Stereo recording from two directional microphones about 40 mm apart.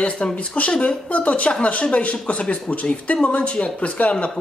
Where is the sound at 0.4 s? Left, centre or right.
Left.